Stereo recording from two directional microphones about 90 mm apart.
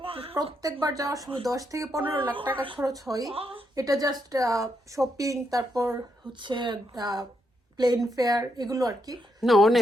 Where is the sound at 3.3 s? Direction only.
90° right.